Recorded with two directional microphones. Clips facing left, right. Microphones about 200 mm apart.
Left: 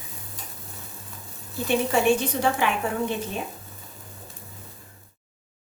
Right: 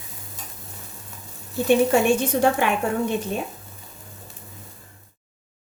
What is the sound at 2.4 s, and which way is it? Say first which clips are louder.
Speech: right 4 dB; 50° right (ahead or behind).